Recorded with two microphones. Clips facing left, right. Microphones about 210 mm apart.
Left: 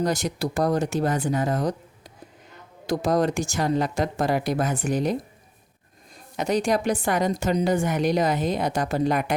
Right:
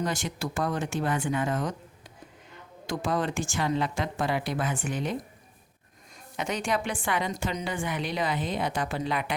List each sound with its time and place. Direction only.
0.0 s a woman's voice: 40° left (ahead or behind)
6.3 s a woman's voice: 40° left (ahead or behind)